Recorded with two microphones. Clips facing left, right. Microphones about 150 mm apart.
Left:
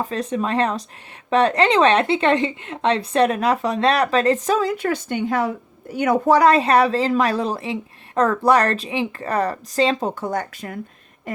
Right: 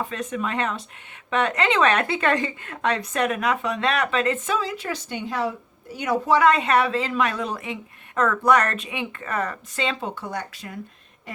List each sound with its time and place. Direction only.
0.0 s speech: 35° left (ahead or behind)